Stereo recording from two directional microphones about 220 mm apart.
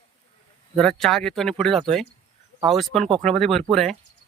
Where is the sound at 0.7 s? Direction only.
Centre (ahead or behind).